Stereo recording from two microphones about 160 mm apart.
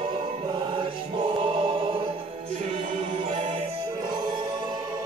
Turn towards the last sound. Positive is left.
turn(degrees=-35)  # may be behind; listen again after turning